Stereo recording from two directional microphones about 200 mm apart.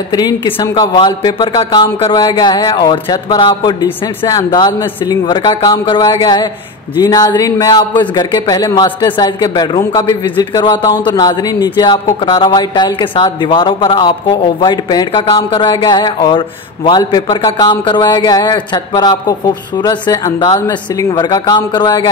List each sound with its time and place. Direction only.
0.1 s a man's voice: 20° left (ahead or behind)